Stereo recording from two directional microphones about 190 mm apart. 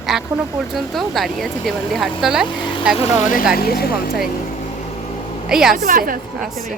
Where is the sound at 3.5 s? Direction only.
55° left (ahead or behind).